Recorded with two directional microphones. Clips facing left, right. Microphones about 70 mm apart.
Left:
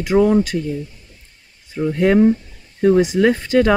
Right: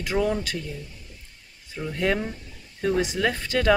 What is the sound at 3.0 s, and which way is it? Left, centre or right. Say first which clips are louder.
Speech: left 10 dB; left.